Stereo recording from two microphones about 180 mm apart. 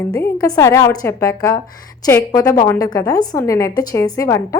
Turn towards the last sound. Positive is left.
turn(degrees=20)  # may be behind; listen again after turning